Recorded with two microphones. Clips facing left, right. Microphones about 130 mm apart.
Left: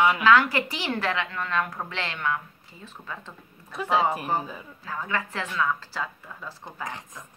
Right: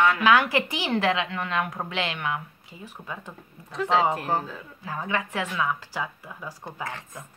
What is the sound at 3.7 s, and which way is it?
Speech, 10° left (ahead or behind).